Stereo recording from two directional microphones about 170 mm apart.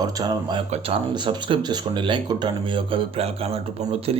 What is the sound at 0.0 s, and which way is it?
Speech, 25° right (ahead or behind).